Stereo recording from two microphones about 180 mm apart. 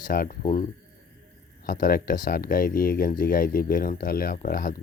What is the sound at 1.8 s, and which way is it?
Speech, 55° left (ahead or behind).